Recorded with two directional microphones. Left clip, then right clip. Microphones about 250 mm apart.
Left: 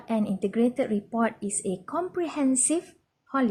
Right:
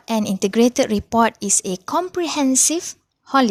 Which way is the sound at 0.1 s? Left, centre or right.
Right.